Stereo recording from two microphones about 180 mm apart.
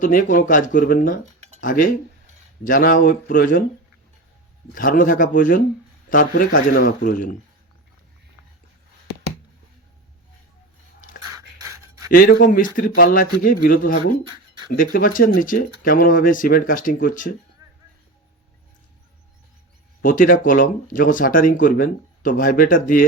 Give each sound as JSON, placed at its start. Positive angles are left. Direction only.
{"t": 0.0, "sound": "speech", "side_deg": 45}
{"t": 1.2, "sound": "a sound", "side_deg": -35}
{"t": 1.6, "sound": "speech", "side_deg": 50}
{"t": 4.7, "sound": "speech", "side_deg": 50}
{"t": 11.3, "sound": "pant", "side_deg": -20}
{"t": 12.1, "sound": "speech", "side_deg": 50}
{"t": 17.6, "sound": "a sound", "side_deg": -20}
{"t": 20.0, "sound": "speech", "side_deg": 50}